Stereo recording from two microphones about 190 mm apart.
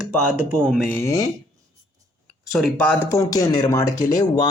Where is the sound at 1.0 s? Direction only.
15° left (ahead or behind).